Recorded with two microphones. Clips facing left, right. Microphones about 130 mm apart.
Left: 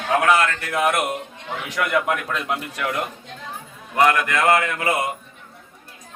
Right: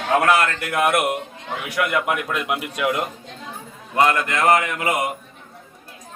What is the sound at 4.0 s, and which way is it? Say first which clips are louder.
A man's voice: even; 25° right (ahead or behind).